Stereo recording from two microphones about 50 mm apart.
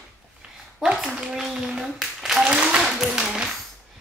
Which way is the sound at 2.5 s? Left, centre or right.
Right.